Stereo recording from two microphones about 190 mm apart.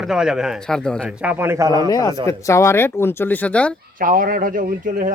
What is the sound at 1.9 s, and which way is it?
A man's voice, 20° left (ahead or behind).